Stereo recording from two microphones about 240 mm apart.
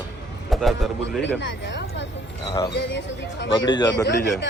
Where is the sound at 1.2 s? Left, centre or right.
Left.